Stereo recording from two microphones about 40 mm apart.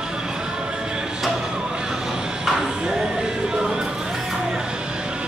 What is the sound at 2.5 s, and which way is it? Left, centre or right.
Music, centre.